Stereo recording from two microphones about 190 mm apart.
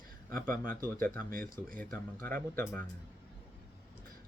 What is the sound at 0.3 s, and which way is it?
Speech, 50° right (ahead or behind).